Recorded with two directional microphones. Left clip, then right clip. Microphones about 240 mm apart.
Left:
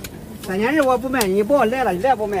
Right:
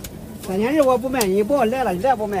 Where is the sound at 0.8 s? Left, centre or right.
Left.